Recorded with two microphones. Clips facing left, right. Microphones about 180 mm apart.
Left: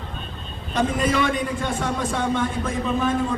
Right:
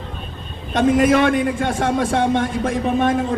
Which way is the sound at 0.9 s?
60° right (ahead or behind).